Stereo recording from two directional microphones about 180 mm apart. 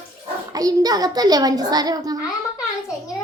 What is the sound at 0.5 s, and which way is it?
A child's voice, 20° right (ahead or behind).